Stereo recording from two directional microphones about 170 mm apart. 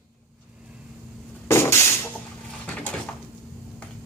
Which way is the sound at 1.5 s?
15° left (ahead or behind).